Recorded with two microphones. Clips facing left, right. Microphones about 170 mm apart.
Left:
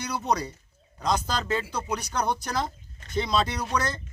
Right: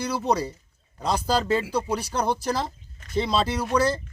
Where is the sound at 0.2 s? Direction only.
30° right (ahead or behind).